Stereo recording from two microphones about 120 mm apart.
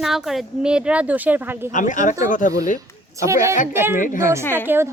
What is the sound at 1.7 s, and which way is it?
Speech, 90° left.